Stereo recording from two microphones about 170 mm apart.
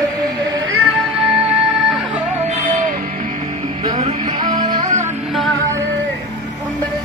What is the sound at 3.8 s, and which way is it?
Music, 30° right (ahead or behind).